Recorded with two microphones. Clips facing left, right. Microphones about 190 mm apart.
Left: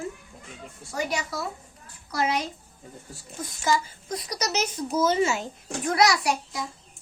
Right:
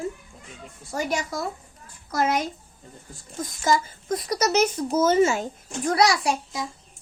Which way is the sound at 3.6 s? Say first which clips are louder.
Right 3 dB; 50° right (ahead or behind).